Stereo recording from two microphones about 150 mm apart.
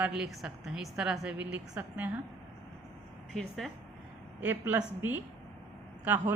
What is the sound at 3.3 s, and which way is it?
Speech, 5° left (ahead or behind).